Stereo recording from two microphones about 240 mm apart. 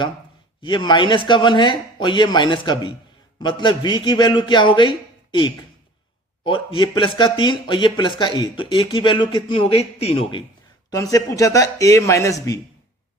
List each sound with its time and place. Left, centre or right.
0.6 s speech: centre